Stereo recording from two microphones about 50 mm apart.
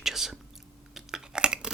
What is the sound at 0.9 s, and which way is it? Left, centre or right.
Chewing, centre.